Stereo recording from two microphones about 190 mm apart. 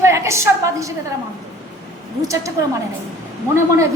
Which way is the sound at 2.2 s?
15° right (ahead or behind).